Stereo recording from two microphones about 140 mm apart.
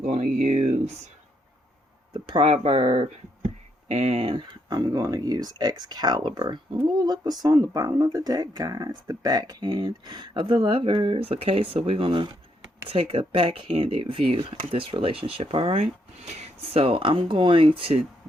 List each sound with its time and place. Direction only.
0.0 s speech: 55° right (ahead or behind)
2.1 s speech: 35° right (ahead or behind)